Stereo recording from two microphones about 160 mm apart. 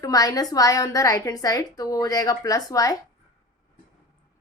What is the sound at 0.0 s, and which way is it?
A woman's voice, 20° left (ahead or behind).